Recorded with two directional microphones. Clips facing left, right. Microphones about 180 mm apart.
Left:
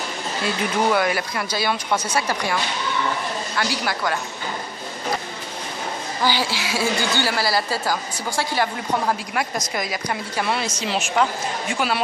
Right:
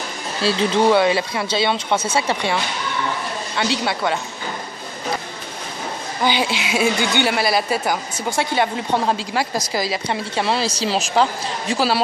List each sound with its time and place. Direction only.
0.4 s a woman's voice: 30° right (ahead or behind)
3.5 s a woman's voice: 25° right (ahead or behind)
6.2 s a woman's voice: 20° right (ahead or behind)